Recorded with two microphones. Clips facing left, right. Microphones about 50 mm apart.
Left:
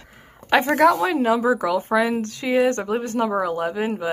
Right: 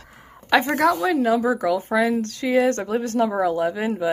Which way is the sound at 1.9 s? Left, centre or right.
Left.